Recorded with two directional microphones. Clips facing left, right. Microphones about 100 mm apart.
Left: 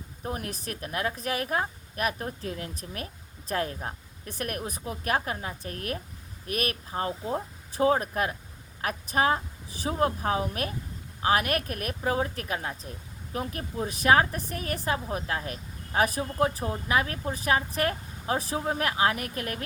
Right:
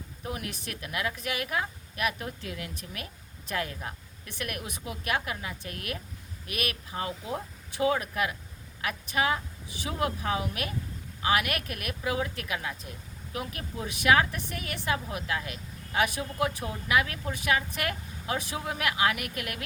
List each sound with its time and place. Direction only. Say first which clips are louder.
0.2 s speech: left 2 dB; 40° left (ahead or behind)